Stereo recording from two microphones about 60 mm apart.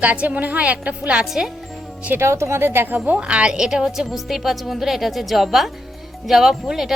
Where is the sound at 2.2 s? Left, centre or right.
Right.